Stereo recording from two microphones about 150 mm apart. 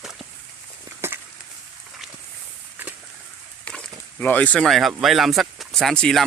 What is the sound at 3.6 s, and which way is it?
Speech, 10° left (ahead or behind).